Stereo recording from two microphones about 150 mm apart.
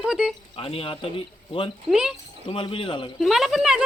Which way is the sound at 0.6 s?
35° left (ahead or behind).